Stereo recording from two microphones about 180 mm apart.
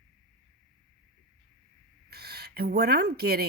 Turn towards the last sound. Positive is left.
turn(degrees=-65)  # may be behind; listen again after turning